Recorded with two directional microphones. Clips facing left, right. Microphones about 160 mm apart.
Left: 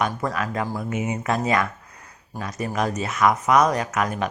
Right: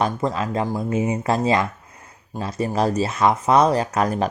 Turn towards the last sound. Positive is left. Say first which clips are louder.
# right 4 dB
turn(degrees=-35)  # may be behind; listen again after turning